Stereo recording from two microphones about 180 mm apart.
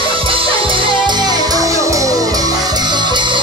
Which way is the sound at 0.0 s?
30° right (ahead or behind).